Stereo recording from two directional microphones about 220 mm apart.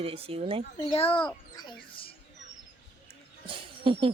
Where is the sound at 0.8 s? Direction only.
25° left (ahead or behind).